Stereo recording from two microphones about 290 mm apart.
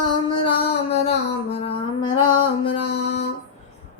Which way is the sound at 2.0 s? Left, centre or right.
Centre.